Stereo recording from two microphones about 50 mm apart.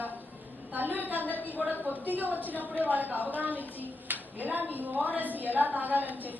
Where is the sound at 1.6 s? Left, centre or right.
Right.